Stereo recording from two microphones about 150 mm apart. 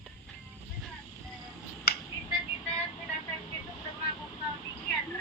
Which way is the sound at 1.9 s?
90° left.